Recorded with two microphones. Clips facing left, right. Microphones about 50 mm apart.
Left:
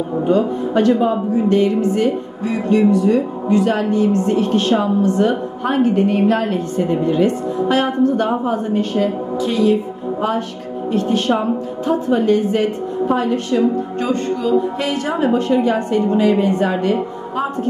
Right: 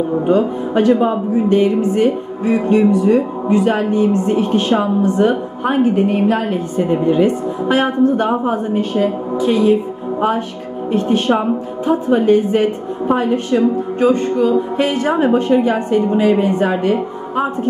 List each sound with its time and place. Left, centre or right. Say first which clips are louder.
0.3 s a woman's voice: even; centre
10.9 s speech: right 2 dB; right